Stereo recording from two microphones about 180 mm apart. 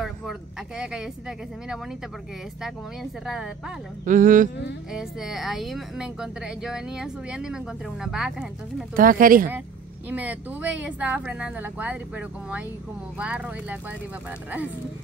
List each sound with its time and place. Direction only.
0.0 s speech: centre (ahead or behind)
2.6 s speech: centre (ahead or behind)
4.0 s speech: 45° right (ahead or behind)
4.9 s speech: centre (ahead or behind)
8.9 s speech: 50° right (ahead or behind)
10.0 s speech: 10° right (ahead or behind)